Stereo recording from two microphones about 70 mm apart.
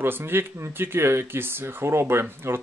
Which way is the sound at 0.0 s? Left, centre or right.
Right.